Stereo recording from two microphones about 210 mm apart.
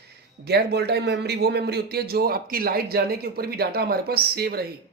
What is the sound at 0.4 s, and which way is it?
Speech, 50° right (ahead or behind).